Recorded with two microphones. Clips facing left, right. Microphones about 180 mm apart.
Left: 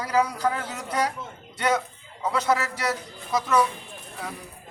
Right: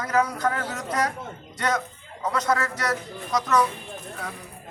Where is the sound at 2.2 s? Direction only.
10° left (ahead or behind).